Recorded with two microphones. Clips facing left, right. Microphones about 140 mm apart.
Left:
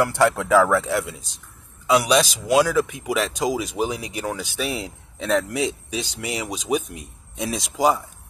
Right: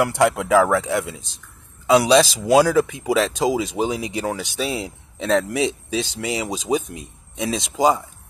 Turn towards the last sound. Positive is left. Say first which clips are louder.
# right 2 dB
turn(degrees=-25)  # may be behind; listen again after turning